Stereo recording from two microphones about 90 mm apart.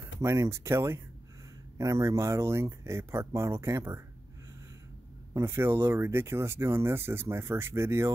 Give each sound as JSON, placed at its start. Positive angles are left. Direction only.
{"t": 0.2, "sound": "speech", "side_deg": -35}
{"t": 5.3, "sound": "speech", "side_deg": -30}